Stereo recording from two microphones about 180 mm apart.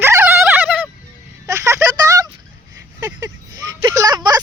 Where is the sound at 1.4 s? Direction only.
15° right (ahead or behind).